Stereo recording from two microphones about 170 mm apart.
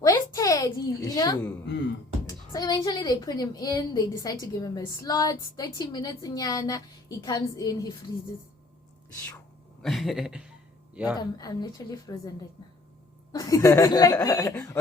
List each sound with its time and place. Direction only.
0.0 s a sound: 20° left (ahead or behind)
2.2 s a woman's voice: 20° left (ahead or behind)
9.8 s speech: centre (ahead or behind)
11.2 s a woman's voice: 25° left (ahead or behind)
13.3 s a woman's voice: 20° left (ahead or behind)